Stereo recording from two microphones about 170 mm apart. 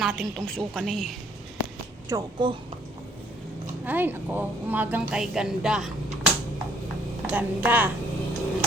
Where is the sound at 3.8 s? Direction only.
10° right (ahead or behind).